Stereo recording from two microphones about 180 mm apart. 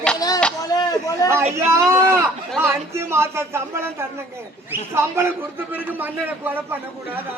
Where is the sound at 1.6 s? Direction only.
15° right (ahead or behind).